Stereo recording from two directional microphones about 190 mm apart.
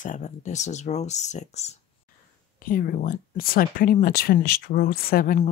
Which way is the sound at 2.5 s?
50° left (ahead or behind).